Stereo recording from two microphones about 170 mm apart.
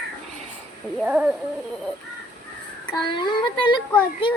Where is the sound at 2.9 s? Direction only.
25° left (ahead or behind).